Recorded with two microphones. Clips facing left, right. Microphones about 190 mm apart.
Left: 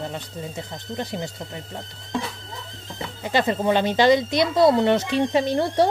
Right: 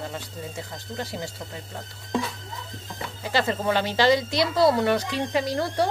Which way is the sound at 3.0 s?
20° left (ahead or behind).